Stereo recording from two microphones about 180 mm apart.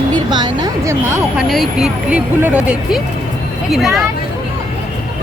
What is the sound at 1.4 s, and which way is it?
Speech, centre (ahead or behind).